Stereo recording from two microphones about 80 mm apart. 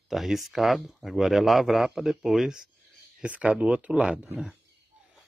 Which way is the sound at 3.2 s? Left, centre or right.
Centre.